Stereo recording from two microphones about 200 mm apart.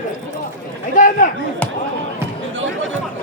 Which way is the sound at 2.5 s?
70° right (ahead or behind).